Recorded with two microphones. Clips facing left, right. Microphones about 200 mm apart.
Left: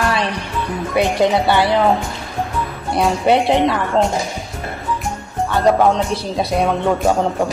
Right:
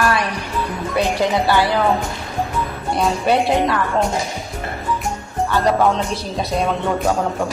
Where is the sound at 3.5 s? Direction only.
25° left (ahead or behind).